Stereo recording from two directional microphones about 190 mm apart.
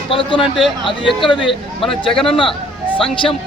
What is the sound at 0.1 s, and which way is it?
Speech, 25° left (ahead or behind).